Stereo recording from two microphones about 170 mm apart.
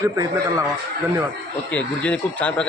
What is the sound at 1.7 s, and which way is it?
Speech, 10° left (ahead or behind).